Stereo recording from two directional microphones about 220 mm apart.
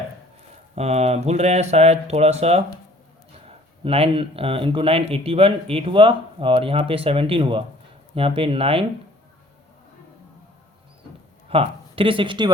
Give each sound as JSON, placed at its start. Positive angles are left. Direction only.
{"t": 0.8, "sound": "speech", "side_deg": -30}
{"t": 3.8, "sound": "speech", "side_deg": -25}
{"t": 11.4, "sound": "speech", "side_deg": -25}